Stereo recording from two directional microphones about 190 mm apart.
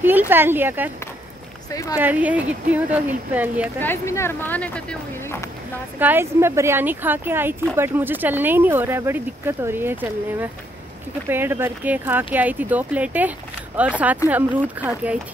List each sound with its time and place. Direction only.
0.3 s speech: 10° right (ahead or behind)
1.7 s speech: 15° left (ahead or behind)
2.0 s speech: 10° right (ahead or behind)
3.8 s speech: 15° left (ahead or behind)
5.9 s speech: 10° right (ahead or behind)